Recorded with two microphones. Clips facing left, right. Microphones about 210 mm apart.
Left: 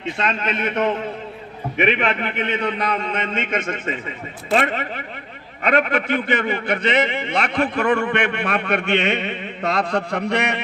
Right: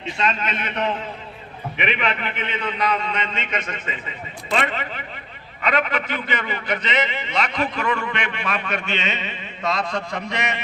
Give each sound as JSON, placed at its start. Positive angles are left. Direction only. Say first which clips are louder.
{"t": 0.0, "sound": "a man's voice", "louder": "left 1 dB", "side_deg": 55}